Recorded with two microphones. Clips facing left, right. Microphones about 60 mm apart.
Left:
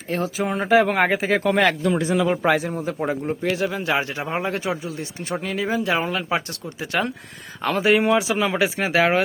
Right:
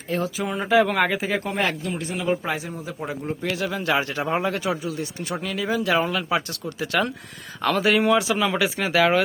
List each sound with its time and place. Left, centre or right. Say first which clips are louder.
0.1 s speech: left 2 dB; left
1.5 s speech: left 6 dB; left
3.2 s speech: even; left